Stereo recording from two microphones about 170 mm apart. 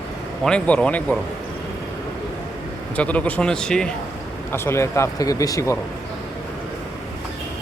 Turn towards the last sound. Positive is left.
turn(degrees=20)  # may be behind; listen again after turning